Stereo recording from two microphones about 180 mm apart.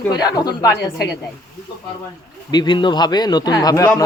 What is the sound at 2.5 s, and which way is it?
Speech, 25° left (ahead or behind).